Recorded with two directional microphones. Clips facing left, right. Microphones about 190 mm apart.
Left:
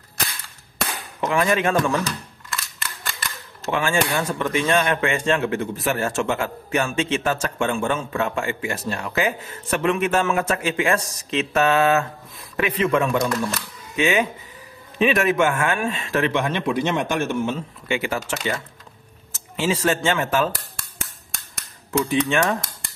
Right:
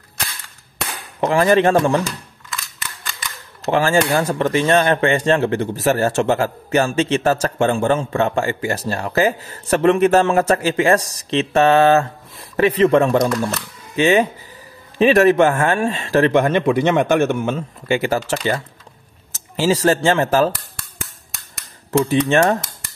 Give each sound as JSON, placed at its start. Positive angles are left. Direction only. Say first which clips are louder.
{"t": 1.2, "sound": "speech", "louder": "right 6 dB", "side_deg": -30}
{"t": 2.5, "sound": "a sound", "louder": "even", "side_deg": 0}
{"t": 3.7, "sound": "speech", "louder": "right 6 dB", "side_deg": -40}
{"t": 17.8, "sound": "speech", "louder": "right 6 dB", "side_deg": -35}
{"t": 22.1, "sound": "speech", "louder": "right 5 dB", "side_deg": -35}